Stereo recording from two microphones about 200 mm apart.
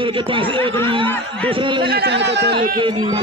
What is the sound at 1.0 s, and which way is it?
Speech, 10° left (ahead or behind).